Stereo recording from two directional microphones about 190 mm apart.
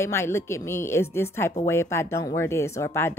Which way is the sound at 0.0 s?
15° left (ahead or behind).